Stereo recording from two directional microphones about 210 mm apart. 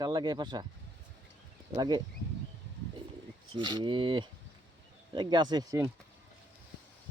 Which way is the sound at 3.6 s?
20° right (ahead or behind).